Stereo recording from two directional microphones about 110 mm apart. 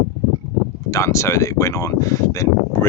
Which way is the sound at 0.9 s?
25° left (ahead or behind).